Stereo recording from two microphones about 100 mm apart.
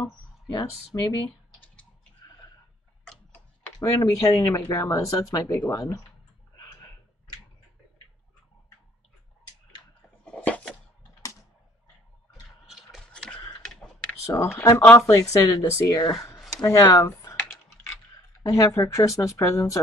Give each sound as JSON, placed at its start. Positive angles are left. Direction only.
{"t": 0.5, "sound": "speech", "side_deg": 40}
{"t": 3.8, "sound": "speech", "side_deg": 30}
{"t": 10.2, "sound": "a sound", "side_deg": 10}
{"t": 13.7, "sound": "computer keyboard", "side_deg": 5}
{"t": 14.2, "sound": "speech", "side_deg": 30}
{"t": 18.4, "sound": "speech", "side_deg": 30}